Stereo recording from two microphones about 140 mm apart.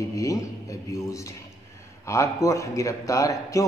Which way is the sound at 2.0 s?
20° left (ahead or behind).